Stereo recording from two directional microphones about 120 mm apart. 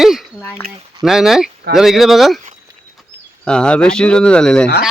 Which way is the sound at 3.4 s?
10° left (ahead or behind).